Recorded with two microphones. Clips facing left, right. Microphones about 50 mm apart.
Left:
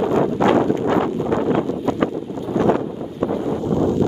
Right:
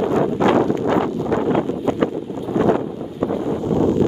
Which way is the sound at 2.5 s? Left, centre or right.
Centre.